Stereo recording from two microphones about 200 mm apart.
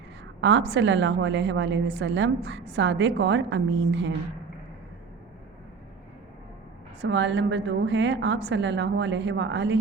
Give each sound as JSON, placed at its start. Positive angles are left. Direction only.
{"t": 0.7, "sound": "a woman's voice", "side_deg": -65}
{"t": 7.0, "sound": "a woman's voice", "side_deg": -65}